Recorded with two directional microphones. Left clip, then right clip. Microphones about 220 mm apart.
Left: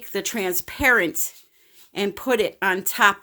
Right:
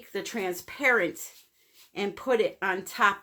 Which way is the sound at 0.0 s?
50° left (ahead or behind).